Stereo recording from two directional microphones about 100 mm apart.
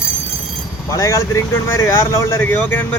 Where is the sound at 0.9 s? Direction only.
30° left (ahead or behind).